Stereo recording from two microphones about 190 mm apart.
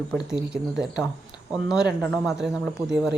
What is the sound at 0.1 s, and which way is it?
Speech, 5° right (ahead or behind).